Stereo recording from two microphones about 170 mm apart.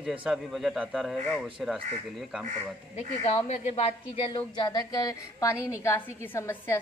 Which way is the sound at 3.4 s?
40° left (ahead or behind).